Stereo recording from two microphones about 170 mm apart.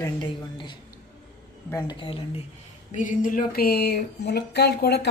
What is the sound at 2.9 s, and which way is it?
Speech, 50° left (ahead or behind).